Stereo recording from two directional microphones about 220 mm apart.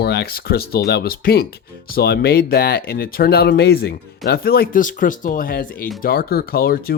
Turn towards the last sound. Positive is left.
turn(degrees=45)  # may be behind; listen again after turning